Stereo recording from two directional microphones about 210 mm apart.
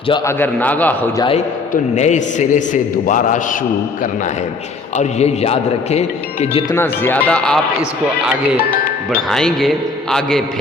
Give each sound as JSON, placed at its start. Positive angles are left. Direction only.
{"t": 0.1, "sound": "speech", "side_deg": 10}
{"t": 1.7, "sound": "a man's voice", "side_deg": 35}
{"t": 4.9, "sound": "a man's voice", "side_deg": 30}
{"t": 6.7, "sound": "speech", "side_deg": 10}
{"t": 9.3, "sound": "a man's voice", "side_deg": 0}